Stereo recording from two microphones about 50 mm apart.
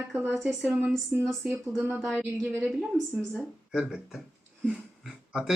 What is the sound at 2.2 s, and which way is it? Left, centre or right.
Speech, right.